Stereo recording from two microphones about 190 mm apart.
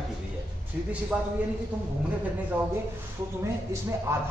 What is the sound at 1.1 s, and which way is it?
Speech, 5° right (ahead or behind).